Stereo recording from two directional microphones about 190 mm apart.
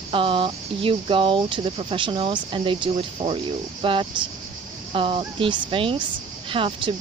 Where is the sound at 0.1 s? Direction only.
25° right (ahead or behind).